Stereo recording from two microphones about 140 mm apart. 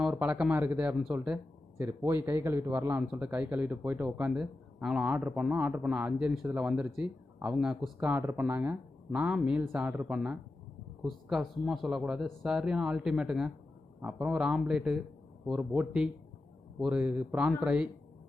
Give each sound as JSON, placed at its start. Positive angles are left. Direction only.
{"t": 0.0, "sound": "speech", "side_deg": -5}
{"t": 1.8, "sound": "speech", "side_deg": -15}